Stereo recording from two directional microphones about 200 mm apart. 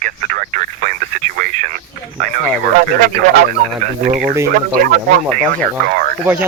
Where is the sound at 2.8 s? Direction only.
45° right (ahead or behind).